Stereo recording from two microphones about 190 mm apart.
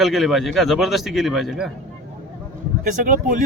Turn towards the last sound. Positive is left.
turn(degrees=-45)  # may be behind; listen again after turning